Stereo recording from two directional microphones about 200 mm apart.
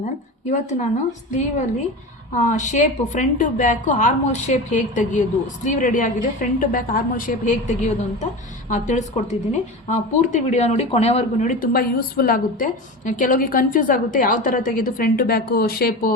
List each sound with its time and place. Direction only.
0.5 s a woman's voice: 35° left (ahead or behind)